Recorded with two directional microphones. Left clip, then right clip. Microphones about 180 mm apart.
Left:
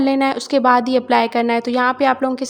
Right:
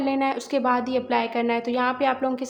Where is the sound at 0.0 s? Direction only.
40° left (ahead or behind).